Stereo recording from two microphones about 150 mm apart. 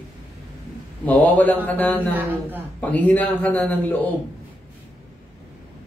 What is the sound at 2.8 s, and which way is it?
A man's voice, 10° left (ahead or behind).